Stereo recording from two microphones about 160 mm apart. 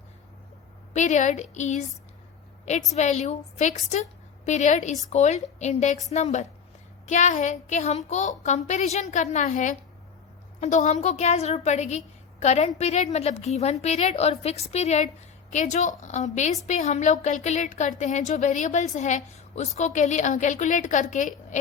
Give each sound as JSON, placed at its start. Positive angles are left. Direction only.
{"t": 0.9, "sound": "a woman's voice", "side_deg": 50}
{"t": 2.9, "sound": "a woman's voice", "side_deg": 45}